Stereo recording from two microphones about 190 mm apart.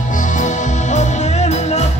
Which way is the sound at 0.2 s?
40° left (ahead or behind).